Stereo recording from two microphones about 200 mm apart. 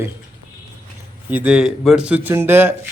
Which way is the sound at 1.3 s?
5° right (ahead or behind).